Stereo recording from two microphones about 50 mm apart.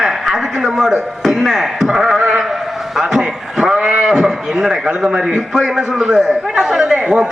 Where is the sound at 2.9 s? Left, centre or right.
Centre.